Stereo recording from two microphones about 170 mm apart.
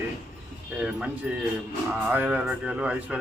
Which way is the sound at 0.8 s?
5° right (ahead or behind).